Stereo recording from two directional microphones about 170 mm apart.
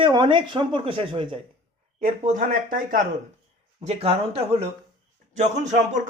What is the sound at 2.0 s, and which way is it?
Speech, 45° right (ahead or behind).